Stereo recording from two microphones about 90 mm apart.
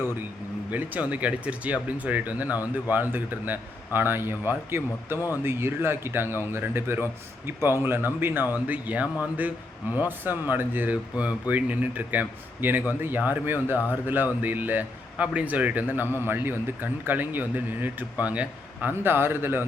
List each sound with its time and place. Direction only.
0.7 s speech: 20° right (ahead or behind)